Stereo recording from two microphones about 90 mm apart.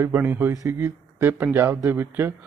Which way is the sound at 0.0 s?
25° right (ahead or behind).